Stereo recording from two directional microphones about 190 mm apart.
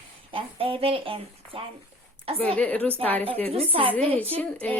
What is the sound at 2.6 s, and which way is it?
Speech, 10° left (ahead or behind).